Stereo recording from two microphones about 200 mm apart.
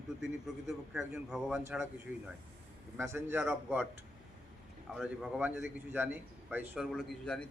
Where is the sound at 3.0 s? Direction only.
15° right (ahead or behind).